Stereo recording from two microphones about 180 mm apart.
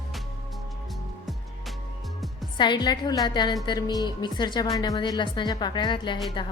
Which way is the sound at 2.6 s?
25° left (ahead or behind).